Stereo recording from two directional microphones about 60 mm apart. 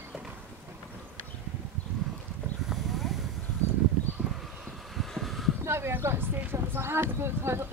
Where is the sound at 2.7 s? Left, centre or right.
Centre.